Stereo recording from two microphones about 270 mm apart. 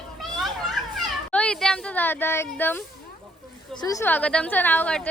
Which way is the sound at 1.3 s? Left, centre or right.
Centre.